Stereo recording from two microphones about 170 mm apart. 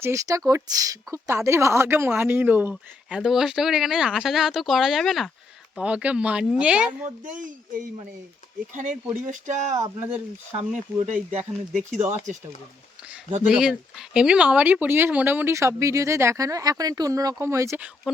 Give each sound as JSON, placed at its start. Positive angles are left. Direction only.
{"t": 0.0, "sound": "speech", "side_deg": -20}
{"t": 8.7, "sound": "speech", "side_deg": -50}
{"t": 9.7, "sound": "speech", "side_deg": -15}
{"t": 11.3, "sound": "speech", "side_deg": -40}
{"t": 13.4, "sound": "speech", "side_deg": -5}